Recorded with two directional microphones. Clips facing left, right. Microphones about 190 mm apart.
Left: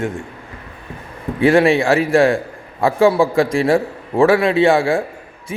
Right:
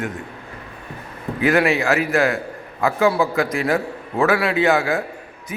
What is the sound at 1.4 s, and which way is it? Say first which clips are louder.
A man's voice: left 5 dB; 30° left (ahead or behind).